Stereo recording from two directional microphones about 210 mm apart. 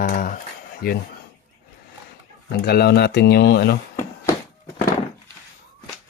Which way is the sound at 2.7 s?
50° left (ahead or behind).